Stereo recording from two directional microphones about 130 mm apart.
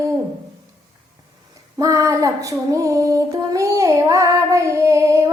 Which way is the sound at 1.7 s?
25° right (ahead or behind).